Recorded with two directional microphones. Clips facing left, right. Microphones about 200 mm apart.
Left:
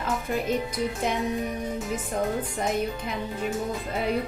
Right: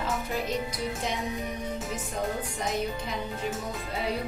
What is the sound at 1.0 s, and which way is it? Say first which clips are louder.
Speech: left 5 dB; 55° left (ahead or behind).